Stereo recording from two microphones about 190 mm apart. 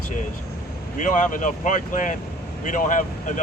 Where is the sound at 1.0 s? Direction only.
40° left (ahead or behind).